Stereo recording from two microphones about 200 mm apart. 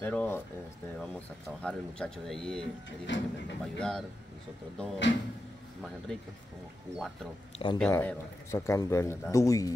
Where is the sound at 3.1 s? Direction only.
65° left (ahead or behind).